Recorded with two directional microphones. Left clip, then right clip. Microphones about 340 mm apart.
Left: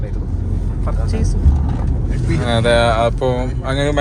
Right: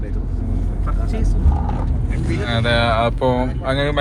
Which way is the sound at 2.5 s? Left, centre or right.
Centre.